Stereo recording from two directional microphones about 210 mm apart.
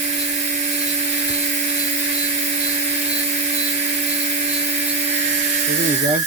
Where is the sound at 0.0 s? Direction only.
30° right (ahead or behind).